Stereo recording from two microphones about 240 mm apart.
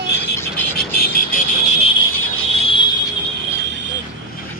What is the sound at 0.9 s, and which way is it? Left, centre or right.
Vehicle, left.